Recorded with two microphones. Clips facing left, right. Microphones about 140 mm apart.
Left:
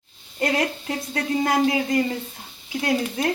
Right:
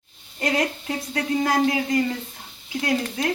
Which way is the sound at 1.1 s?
25° left (ahead or behind).